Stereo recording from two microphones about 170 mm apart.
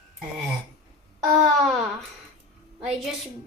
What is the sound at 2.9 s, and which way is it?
Child singing, centre (ahead or behind).